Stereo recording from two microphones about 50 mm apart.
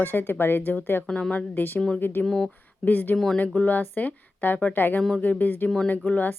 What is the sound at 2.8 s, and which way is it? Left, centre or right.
Speech, left.